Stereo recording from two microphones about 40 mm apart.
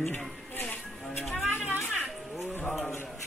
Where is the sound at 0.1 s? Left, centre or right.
Left.